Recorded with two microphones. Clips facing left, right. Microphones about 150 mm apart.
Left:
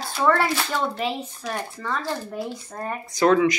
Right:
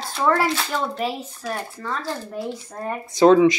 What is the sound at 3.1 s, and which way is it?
Speech, 25° right (ahead or behind).